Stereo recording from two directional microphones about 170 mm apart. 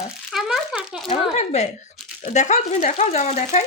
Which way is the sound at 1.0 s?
40° left (ahead or behind).